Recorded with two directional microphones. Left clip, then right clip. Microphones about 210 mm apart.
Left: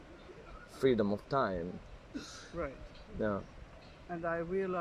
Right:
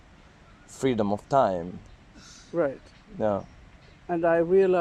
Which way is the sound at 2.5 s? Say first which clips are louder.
Right 14 dB; 40° right (ahead or behind).